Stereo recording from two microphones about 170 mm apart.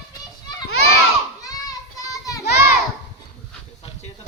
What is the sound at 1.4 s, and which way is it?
Children playing, 20° left (ahead or behind).